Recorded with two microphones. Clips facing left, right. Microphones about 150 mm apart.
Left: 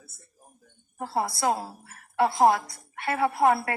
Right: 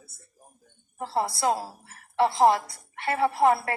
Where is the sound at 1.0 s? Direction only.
30° right (ahead or behind).